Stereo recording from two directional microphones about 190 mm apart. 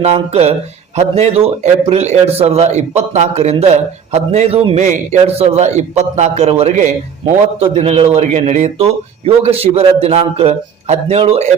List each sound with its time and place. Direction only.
0.0 s a man's voice: 35° right (ahead or behind)